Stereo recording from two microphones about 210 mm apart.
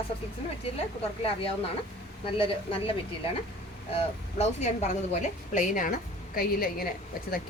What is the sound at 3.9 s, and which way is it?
Speech, 30° left (ahead or behind).